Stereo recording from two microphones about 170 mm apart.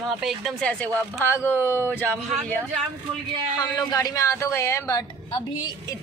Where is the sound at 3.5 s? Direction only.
20° left (ahead or behind).